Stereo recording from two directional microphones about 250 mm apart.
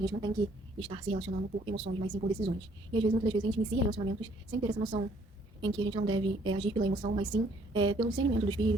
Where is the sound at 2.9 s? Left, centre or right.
Centre.